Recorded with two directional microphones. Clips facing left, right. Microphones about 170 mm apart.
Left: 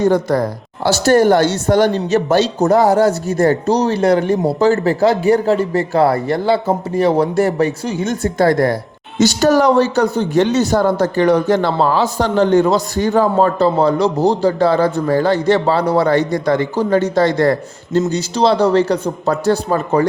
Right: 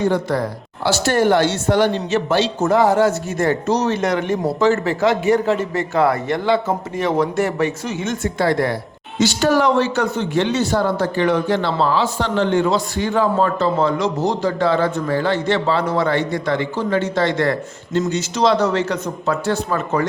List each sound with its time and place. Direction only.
0.0 s speech: 40° left (ahead or behind)